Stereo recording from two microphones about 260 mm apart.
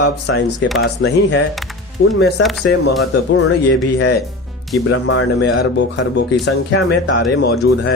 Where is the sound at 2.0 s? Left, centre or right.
Left.